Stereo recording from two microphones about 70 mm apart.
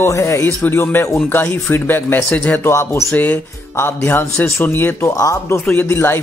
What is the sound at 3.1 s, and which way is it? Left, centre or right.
Speech, left.